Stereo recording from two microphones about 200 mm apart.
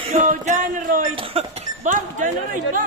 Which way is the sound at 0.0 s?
35° right (ahead or behind).